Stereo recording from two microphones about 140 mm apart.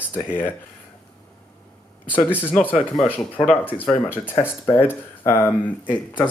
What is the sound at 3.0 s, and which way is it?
Speech, 5° left (ahead or behind).